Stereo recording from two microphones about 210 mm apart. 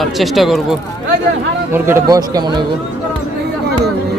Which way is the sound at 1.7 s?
15° right (ahead or behind).